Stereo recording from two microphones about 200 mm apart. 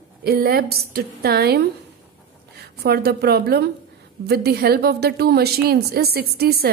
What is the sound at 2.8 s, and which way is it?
A woman's voice, 50° right (ahead or behind).